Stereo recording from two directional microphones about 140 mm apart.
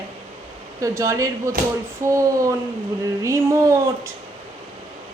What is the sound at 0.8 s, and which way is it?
Speech, 20° right (ahead or behind).